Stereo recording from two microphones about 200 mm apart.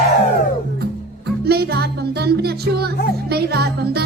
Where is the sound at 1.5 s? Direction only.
50° right (ahead or behind).